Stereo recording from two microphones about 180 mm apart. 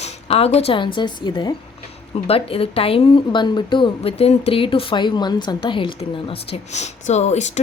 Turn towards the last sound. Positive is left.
turn(degrees=40)  # may be behind; listen again after turning